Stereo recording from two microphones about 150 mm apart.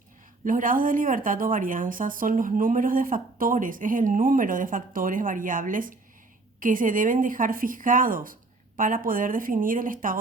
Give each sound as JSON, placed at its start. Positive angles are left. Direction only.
{"t": 0.4, "sound": "a woman's voice", "side_deg": -65}